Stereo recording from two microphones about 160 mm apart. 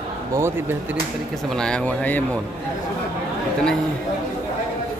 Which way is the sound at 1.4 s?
5° left (ahead or behind).